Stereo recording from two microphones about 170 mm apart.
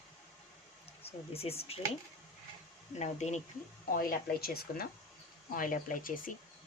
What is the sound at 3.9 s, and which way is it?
Speech, 55° left (ahead or behind).